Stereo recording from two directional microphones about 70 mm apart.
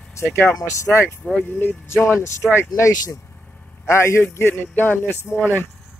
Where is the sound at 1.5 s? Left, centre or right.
Left.